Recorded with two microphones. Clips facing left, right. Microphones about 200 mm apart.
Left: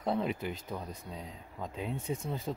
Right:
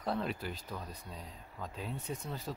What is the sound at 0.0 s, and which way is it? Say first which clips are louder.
Speech: left 4 dB; 20° left (ahead or behind).